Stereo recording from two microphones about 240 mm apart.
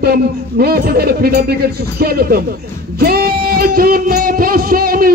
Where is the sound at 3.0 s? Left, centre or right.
Right.